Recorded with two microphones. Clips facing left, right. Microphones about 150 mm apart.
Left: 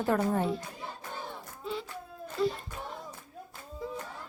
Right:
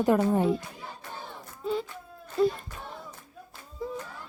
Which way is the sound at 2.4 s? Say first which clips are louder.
Right 5 dB; 50° right (ahead or behind).